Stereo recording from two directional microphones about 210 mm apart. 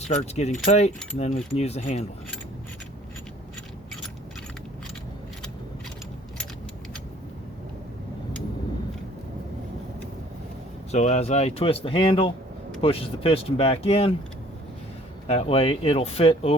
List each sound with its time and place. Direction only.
0.1 s speech: 35° left (ahead or behind)
10.9 s speech: 35° left (ahead or behind)
15.3 s speech: 30° left (ahead or behind)